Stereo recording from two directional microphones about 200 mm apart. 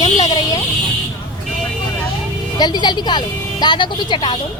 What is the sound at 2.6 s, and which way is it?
A woman's voice, 20° left (ahead or behind).